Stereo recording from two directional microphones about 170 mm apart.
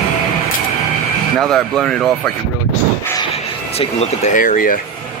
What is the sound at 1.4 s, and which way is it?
Speech, centre (ahead or behind).